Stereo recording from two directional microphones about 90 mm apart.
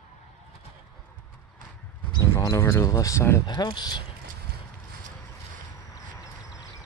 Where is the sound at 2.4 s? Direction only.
35° left (ahead or behind).